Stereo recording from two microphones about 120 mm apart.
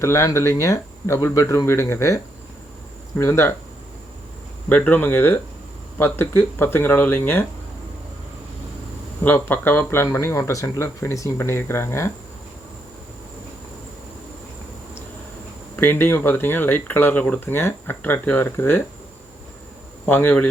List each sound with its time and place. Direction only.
0.0 s speech: 25° left (ahead or behind)
4.7 s speech: 15° left (ahead or behind)
9.2 s speech: 15° left (ahead or behind)
15.7 s speech: 20° left (ahead or behind)
20.1 s speech: 15° left (ahead or behind)